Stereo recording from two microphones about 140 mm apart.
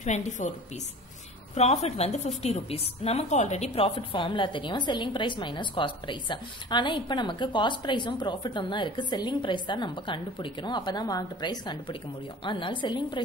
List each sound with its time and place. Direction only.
0.0 s a woman's voice: 55° left (ahead or behind)
1.5 s a woman's voice: 50° left (ahead or behind); by 13.2 s 35° left (ahead or behind)